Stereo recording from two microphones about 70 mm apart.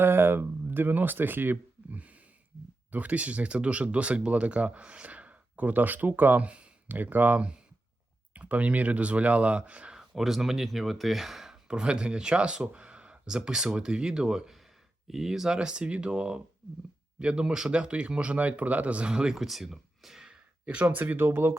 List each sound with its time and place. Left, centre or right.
0.0 s speech: right; by 10.0 s centre
10.0 s speech: centre
20.8 s speech: right